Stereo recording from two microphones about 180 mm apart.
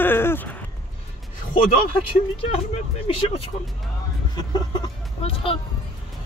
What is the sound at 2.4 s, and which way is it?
Speech, 30° left (ahead or behind).